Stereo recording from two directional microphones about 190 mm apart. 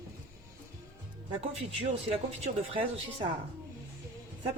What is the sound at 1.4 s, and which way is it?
Speech, 30° right (ahead or behind).